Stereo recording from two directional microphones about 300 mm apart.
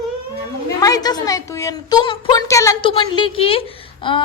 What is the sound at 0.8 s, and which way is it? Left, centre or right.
A woman's voice, centre.